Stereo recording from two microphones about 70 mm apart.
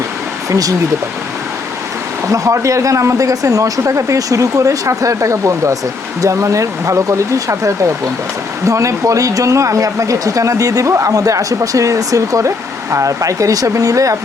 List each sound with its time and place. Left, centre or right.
0.5 s speech: right
2.2 s speech: right